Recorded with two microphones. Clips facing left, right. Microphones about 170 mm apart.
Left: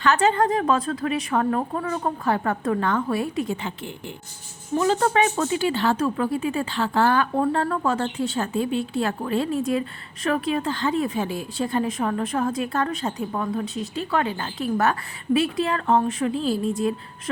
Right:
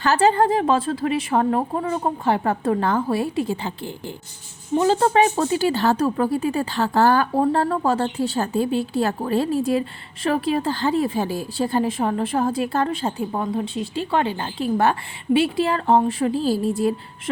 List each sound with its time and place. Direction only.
0.0 s a woman's voice: 35° right (ahead or behind)